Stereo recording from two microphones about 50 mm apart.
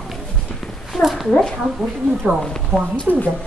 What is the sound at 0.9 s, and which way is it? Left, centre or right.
Speech, centre.